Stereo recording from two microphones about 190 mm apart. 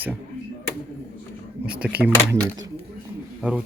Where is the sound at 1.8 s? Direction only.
10° right (ahead or behind).